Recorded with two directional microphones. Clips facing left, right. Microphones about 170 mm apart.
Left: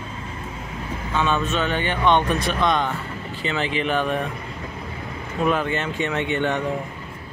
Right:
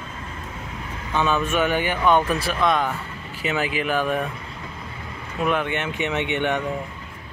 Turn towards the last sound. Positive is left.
turn(degrees=-20)  # may be behind; listen again after turning